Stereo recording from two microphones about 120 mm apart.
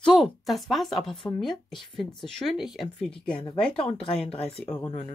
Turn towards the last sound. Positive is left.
turn(degrees=15)  # may be behind; listen again after turning